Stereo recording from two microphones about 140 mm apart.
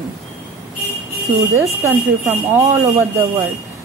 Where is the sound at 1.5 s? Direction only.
15° right (ahead or behind).